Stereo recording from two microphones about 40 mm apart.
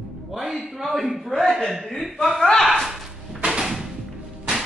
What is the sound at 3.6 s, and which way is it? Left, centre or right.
Music, centre.